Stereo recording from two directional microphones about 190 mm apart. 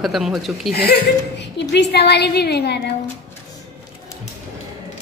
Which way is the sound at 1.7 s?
60° left (ahead or behind).